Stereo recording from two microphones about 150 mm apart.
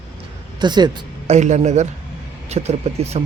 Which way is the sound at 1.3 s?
50° right (ahead or behind).